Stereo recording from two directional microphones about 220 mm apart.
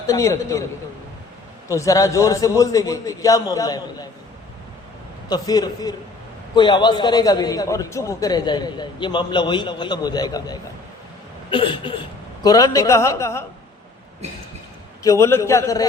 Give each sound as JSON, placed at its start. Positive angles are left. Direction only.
{"t": 0.1, "sound": "a man's voice", "side_deg": 15}
{"t": 1.6, "sound": "a man's voice", "side_deg": 15}
{"t": 5.3, "sound": "a man's voice", "side_deg": 15}
{"t": 15.0, "sound": "a man's voice", "side_deg": 15}